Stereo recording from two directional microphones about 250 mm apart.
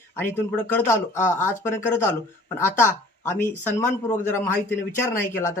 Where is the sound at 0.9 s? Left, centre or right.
Left.